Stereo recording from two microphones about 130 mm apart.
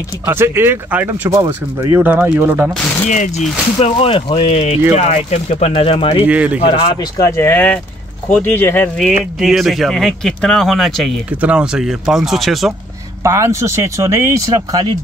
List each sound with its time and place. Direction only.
0.2 s speech: 20° right (ahead or behind)
3.1 s speech: 65° left (ahead or behind); by 6.2 s 45° left (ahead or behind)
6.2 s speech: 10° right (ahead or behind)
6.6 s speech: 45° left (ahead or behind)
7.2 s speech: 20° left (ahead or behind)
9.2 s speech: centre (ahead or behind)
13.2 s speech: 25° right (ahead or behind)